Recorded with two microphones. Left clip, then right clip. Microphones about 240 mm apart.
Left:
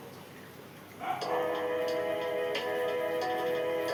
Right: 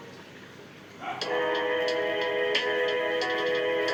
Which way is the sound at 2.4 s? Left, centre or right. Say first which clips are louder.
Right 6 dB; right.